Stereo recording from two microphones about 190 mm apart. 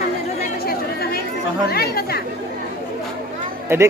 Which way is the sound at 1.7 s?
55° left (ahead or behind).